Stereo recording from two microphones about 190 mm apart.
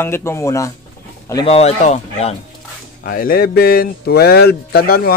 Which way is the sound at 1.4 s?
35° left (ahead or behind).